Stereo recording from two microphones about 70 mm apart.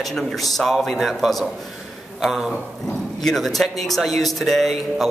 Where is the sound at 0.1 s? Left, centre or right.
Centre.